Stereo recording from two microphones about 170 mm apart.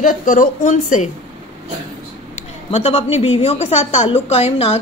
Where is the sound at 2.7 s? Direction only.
40° left (ahead or behind).